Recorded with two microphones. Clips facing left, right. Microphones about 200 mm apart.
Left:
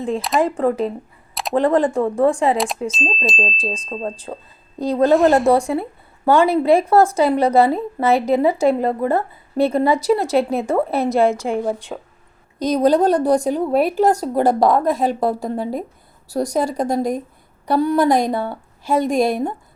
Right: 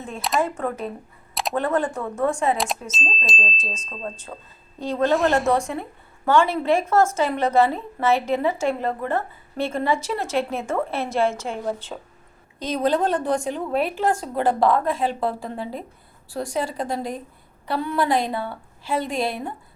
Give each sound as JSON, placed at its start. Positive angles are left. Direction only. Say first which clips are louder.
{"t": 0.3, "sound": "a woman's voice", "louder": "left 6 dB", "side_deg": 35}
{"t": 2.9, "sound": "chime", "louder": "left 7 dB", "side_deg": 0}
{"t": 3.6, "sound": "a woman's voice", "louder": "left 8 dB", "side_deg": 35}
{"t": 11.3, "sound": "a woman's voice", "louder": "left 7 dB", "side_deg": 15}
{"t": 11.9, "sound": "chime", "louder": "left 5 dB", "side_deg": 5}
{"t": 12.5, "sound": "a woman's voice", "louder": "left 7 dB", "side_deg": 40}